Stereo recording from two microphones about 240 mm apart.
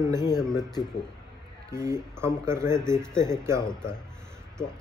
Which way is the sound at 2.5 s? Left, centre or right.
Centre.